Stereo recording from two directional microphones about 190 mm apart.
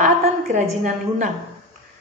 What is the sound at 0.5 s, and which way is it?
Speech, 40° right (ahead or behind).